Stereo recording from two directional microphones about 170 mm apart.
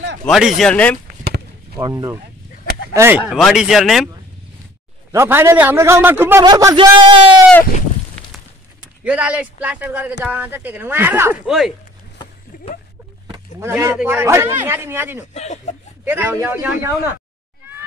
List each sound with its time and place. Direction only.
0.2 s speech: centre (ahead or behind)
1.8 s speech: 25° right (ahead or behind)
2.9 s speech: 15° right (ahead or behind)
3.3 s speech: centre (ahead or behind)
5.1 s a man's voice: 15° right (ahead or behind)
6.4 s speech: 25° right (ahead or behind)
9.0 s a man's voice: 5° right (ahead or behind)
11.4 s speech: centre (ahead or behind)
13.6 s a man's voice: 15° right (ahead or behind)
15.3 s speech: 40° left (ahead or behind)
16.0 s a man's voice: 10° right (ahead or behind)